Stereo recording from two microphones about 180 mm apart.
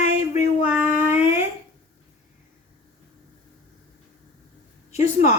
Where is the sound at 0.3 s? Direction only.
10° right (ahead or behind).